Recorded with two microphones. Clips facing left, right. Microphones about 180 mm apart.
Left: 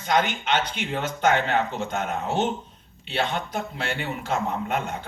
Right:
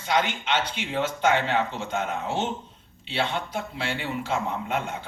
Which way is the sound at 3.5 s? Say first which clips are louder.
Left 1 dB; 50° left (ahead or behind).